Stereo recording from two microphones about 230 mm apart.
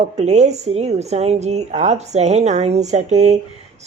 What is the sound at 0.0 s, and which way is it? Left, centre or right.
A woman's voice, right.